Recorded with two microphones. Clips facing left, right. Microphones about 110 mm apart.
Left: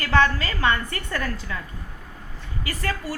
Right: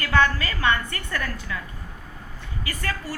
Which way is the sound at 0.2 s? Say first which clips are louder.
Left 1 dB; 25° left (ahead or behind).